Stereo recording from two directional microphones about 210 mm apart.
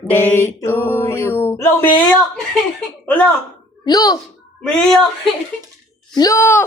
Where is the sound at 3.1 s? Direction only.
5° left (ahead or behind).